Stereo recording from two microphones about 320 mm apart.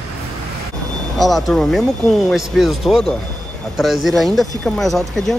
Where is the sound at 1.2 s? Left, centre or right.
Centre.